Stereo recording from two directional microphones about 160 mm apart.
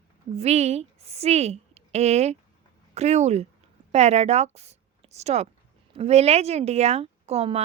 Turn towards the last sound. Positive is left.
turn(degrees=-40)  # may be behind; listen again after turning